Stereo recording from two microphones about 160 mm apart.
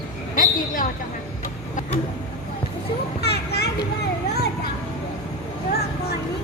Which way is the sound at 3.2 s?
90° left.